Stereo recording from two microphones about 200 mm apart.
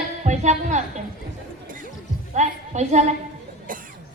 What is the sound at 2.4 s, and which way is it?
Speech, 35° right (ahead or behind).